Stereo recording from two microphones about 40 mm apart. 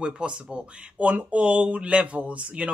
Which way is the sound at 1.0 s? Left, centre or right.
Right.